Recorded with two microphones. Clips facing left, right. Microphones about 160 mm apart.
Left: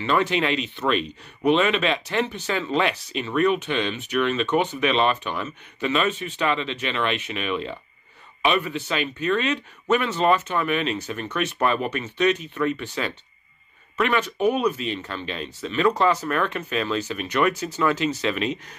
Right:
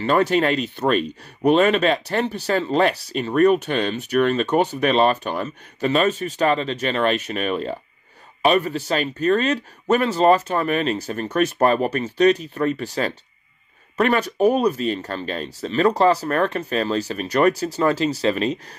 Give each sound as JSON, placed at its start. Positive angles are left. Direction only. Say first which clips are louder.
{"t": 0.0, "sound": "speech", "louder": "right 4 dB", "side_deg": -45}